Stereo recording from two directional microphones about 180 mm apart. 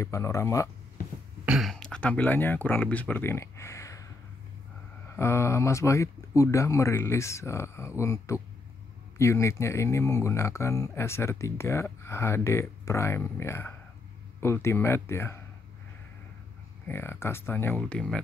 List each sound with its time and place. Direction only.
0.0 s speech: 15° left (ahead or behind)
1.4 s speech: 5° right (ahead or behind); by 4.1 s 15° left (ahead or behind)
5.1 s speech: 15° left (ahead or behind)
16.8 s speech: 10° left (ahead or behind)